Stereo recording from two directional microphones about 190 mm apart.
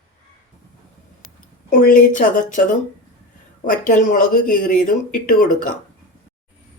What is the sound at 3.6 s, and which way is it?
Speech, 45° left (ahead or behind).